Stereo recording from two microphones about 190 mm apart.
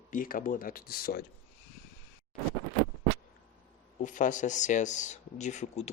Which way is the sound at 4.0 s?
40° left (ahead or behind).